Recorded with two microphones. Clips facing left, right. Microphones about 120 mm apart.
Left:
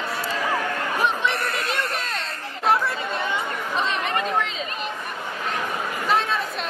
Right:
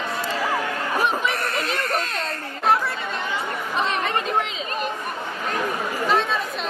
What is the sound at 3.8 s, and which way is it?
Speech, 35° right (ahead or behind).